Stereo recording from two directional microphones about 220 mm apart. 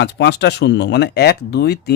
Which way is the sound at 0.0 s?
50° left (ahead or behind).